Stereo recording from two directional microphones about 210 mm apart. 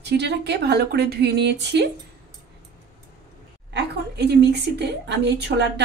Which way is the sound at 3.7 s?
55° right (ahead or behind).